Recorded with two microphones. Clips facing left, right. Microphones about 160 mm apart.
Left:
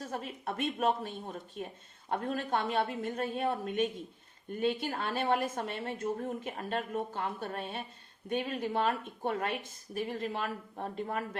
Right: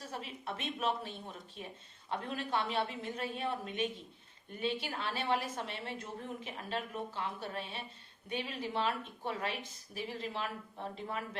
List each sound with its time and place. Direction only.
0.0 s a woman's voice: 50° left (ahead or behind)